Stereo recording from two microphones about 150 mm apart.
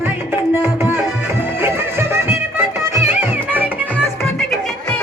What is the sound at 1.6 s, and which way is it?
Music, 15° right (ahead or behind).